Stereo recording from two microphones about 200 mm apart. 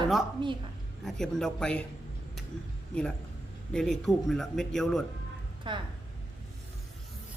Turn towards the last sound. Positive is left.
turn(degrees=-25)  # may be behind; listen again after turning